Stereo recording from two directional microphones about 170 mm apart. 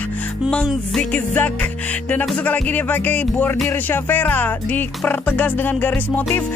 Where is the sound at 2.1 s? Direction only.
10° left (ahead or behind).